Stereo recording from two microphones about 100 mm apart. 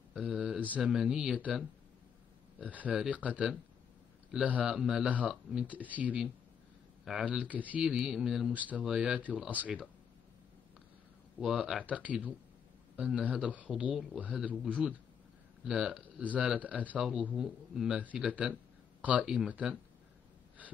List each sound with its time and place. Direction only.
0.1 s speech: 10° right (ahead or behind)
8.5 s speech: 15° right (ahead or behind)
11.3 s speech: 5° right (ahead or behind)
11.8 s speech: 15° right (ahead or behind)